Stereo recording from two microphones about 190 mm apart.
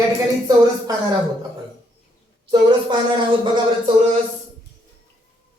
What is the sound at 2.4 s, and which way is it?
Speech, 25° right (ahead or behind).